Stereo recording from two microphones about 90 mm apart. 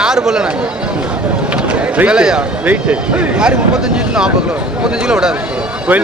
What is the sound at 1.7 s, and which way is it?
Speech, 10° right (ahead or behind).